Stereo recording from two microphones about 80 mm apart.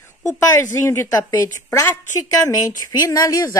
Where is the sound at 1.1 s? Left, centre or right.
Left.